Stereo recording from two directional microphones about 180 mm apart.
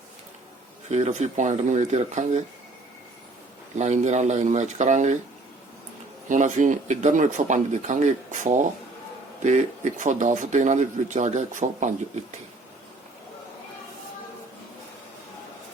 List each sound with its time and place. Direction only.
0.9 s speech: 40° right (ahead or behind)
3.8 s speech: 40° right (ahead or behind)
6.2 s speech: 45° right (ahead or behind)